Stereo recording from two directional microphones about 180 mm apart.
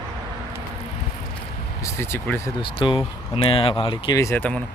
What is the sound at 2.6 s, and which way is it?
Speech, 30° left (ahead or behind).